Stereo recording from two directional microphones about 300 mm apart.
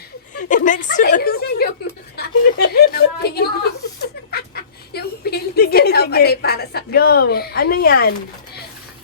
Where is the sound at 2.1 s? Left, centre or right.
Left.